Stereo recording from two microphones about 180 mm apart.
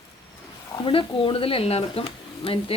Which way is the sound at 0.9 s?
30° left (ahead or behind).